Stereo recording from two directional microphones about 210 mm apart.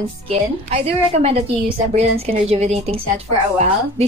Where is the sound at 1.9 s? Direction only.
30° right (ahead or behind).